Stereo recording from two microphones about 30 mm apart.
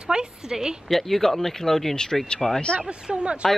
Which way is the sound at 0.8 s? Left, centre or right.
Centre.